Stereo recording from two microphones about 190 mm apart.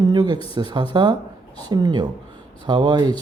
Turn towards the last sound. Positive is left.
turn(degrees=-25)  # may be behind; listen again after turning